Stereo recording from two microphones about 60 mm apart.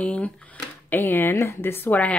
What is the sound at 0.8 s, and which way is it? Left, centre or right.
Speech, left.